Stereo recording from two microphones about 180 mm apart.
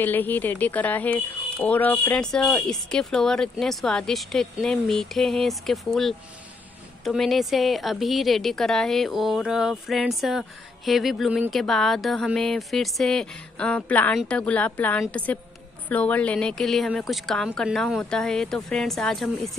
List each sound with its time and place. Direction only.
0.0 s speech: 10° left (ahead or behind)